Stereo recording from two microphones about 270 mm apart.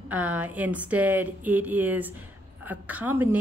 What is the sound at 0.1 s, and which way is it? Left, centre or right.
A woman's voice, centre.